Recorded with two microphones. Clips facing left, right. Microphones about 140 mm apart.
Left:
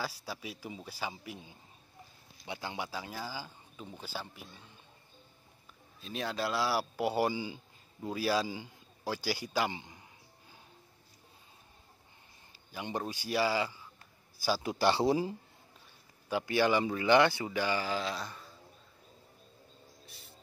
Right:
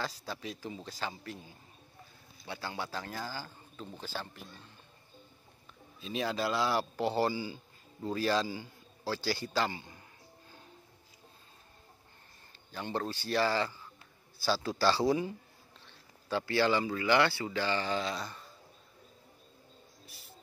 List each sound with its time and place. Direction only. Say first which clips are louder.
0.0 s speech: right 1 dB; 10° left (ahead or behind)
5.9 s a man's voice: right 2 dB; centre (ahead or behind); by 10.0 s 20° left (ahead or behind)
12.7 s speech: right 1 dB; 10° left (ahead or behind); by 15.3 s 25° left (ahead or behind)
16.3 s speech: even; 15° left (ahead or behind)
20.1 s music: even; centre (ahead or behind)